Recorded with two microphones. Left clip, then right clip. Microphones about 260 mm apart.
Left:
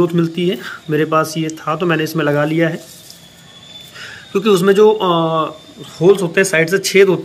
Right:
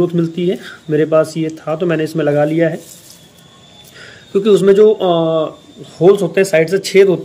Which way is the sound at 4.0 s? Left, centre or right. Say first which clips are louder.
Right 3 dB; centre.